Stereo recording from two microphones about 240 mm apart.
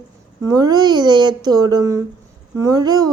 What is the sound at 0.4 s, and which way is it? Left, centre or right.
A woman's voice, centre.